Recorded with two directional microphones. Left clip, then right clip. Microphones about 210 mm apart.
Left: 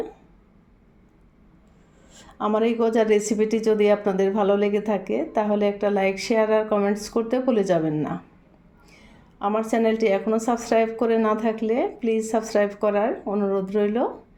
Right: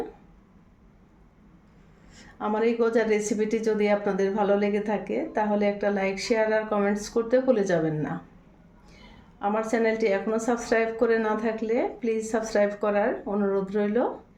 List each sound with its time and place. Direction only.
2.1 s a woman's voice: 25° left (ahead or behind)
9.4 s a woman's voice: 25° left (ahead or behind)